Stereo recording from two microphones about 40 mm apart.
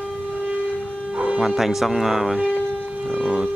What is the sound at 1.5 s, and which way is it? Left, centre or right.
Speech, centre.